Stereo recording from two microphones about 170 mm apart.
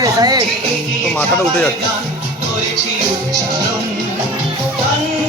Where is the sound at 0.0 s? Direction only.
20° right (ahead or behind).